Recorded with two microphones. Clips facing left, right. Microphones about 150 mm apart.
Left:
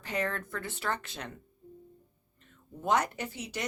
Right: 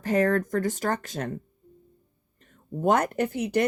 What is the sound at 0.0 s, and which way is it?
Speech, 45° right (ahead or behind).